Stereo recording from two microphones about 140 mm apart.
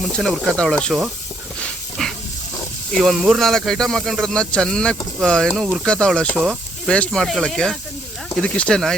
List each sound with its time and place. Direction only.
0.0 s speech: centre (ahead or behind)
2.0 s stir: 5° left (ahead or behind)
2.9 s speech: centre (ahead or behind)